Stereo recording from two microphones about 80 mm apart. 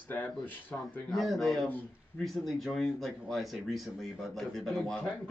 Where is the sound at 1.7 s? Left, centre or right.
Left.